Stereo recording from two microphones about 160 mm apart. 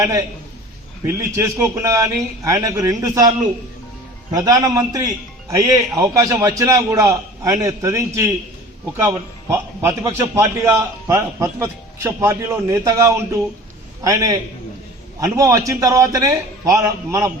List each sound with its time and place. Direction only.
0.0 s a man's voice: 20° right (ahead or behind)